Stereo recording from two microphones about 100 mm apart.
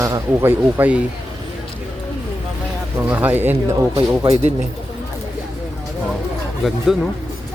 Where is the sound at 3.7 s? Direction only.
35° right (ahead or behind).